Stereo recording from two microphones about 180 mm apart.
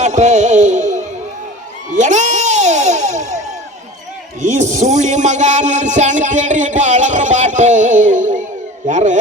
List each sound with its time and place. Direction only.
0.0 s music: 40° right (ahead or behind)
4.4 s speech: 40° right (ahead or behind)